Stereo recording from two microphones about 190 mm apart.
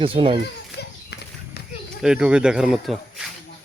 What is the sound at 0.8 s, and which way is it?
Horse, 60° left (ahead or behind).